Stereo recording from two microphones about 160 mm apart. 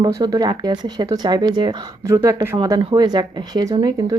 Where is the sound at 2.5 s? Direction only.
30° right (ahead or behind).